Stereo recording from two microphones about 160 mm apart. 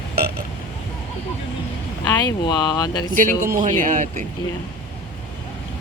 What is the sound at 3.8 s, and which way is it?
Speech, 55° right (ahead or behind).